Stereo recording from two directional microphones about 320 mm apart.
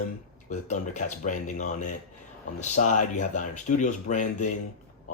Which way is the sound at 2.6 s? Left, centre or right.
Left.